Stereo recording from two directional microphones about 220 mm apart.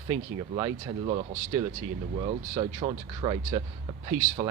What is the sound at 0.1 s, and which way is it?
Speech, 20° right (ahead or behind).